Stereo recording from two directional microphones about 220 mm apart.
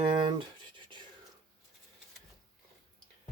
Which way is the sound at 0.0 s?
20° right (ahead or behind).